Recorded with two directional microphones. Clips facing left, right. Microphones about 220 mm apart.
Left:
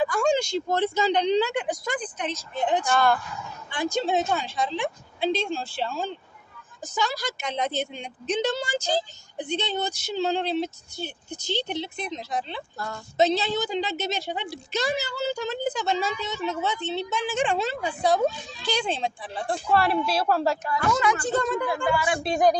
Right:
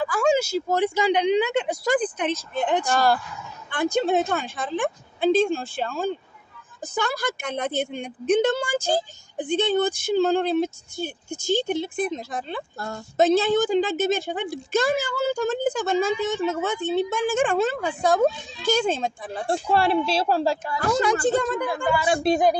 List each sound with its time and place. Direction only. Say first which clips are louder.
0.1 s speech: right 2 dB; 5° right (ahead or behind); by 1.8 s 25° right (ahead or behind)
2.0 s speech: right 7 dB; 55° right (ahead or behind)
2.9 s speech: right 1 dB; 35° right (ahead or behind)
3.7 s speech: right 4 dB; 60° right (ahead or behind)
19.5 s speech: right 2 dB; 30° right (ahead or behind)
21.4 s a woman's voice: right 1 dB; centre (ahead or behind)